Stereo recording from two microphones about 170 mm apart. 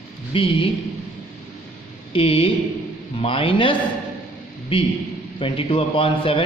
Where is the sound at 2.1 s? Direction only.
30° left (ahead or behind).